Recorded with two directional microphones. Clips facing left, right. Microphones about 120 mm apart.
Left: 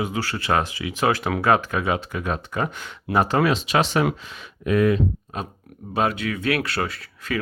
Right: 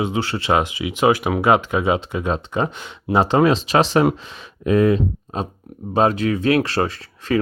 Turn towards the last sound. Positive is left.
turn(degrees=-30)  # may be behind; listen again after turning